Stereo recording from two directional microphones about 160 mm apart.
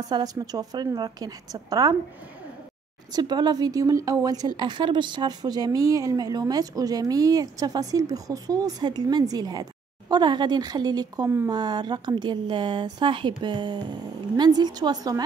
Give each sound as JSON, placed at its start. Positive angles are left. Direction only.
{"t": 0.1, "sound": "speech", "side_deg": -25}
{"t": 3.1, "sound": "speech", "side_deg": -25}